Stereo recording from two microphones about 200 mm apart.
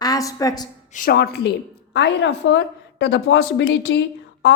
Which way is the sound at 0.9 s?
50° left (ahead or behind).